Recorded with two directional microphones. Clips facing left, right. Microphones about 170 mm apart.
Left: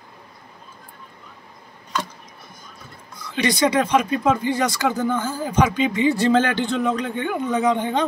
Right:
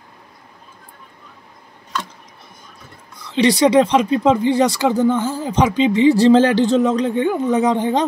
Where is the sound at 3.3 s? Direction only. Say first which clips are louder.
Right 6 dB; 30° right (ahead or behind).